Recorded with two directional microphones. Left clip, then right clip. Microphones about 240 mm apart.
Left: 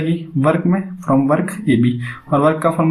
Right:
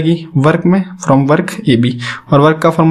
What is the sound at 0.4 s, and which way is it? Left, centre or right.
Speech, right.